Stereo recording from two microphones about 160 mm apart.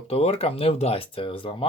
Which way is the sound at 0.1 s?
40° left (ahead or behind).